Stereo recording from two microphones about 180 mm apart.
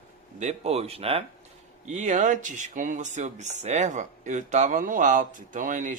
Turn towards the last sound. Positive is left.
turn(degrees=-45)  # may be behind; listen again after turning